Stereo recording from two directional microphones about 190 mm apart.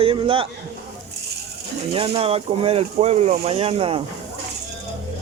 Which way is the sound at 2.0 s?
30° right (ahead or behind).